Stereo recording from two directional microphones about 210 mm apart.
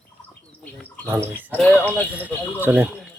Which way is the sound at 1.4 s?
10° right (ahead or behind).